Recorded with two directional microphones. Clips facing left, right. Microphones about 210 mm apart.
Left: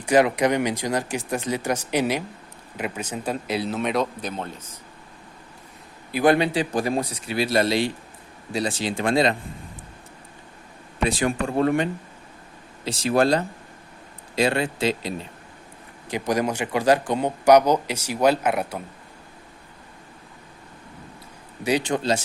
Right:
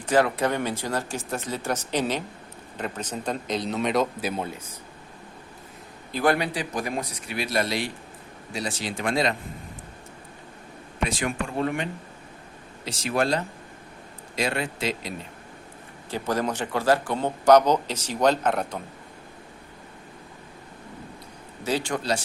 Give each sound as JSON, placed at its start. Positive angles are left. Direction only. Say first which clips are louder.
{"t": 0.0, "sound": "speech", "louder": "left 3 dB", "side_deg": 15}
{"t": 6.1, "sound": "a man's voice", "louder": "left 4 dB", "side_deg": 10}
{"t": 6.3, "sound": "a man's voice", "louder": "left 6 dB", "side_deg": 25}
{"t": 11.0, "sound": "a man's voice", "louder": "left 5 dB", "side_deg": 35}
{"t": 16.0, "sound": "speech", "louder": "left 3 dB", "side_deg": 15}
{"t": 21.6, "sound": "a man's voice", "louder": "left 4 dB", "side_deg": 15}